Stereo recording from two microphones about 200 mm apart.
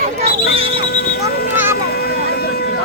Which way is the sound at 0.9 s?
50° left (ahead or behind).